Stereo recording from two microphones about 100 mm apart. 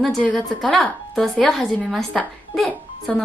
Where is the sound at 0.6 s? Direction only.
Centre (ahead or behind).